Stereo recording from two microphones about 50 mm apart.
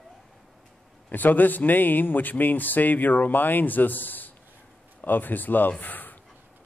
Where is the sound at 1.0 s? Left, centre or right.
Left.